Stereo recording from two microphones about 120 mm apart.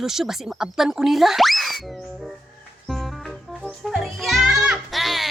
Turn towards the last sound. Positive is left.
turn(degrees=0)  # may be behind; listen again after turning